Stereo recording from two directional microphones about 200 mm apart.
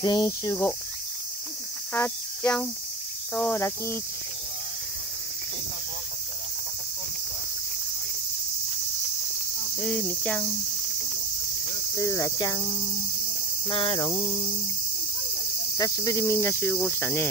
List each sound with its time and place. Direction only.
0.0 s cricket: 20° left (ahead or behind)
2.0 s cricket: 10° left (ahead or behind)
9.8 s cricket: 5° left (ahead or behind)
12.0 s cricket: 15° left (ahead or behind)
13.7 s cricket: 25° left (ahead or behind)
15.8 s cricket: 15° left (ahead or behind)